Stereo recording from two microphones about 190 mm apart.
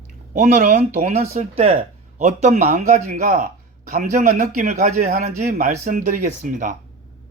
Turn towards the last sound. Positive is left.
turn(degrees=-45)  # may be behind; listen again after turning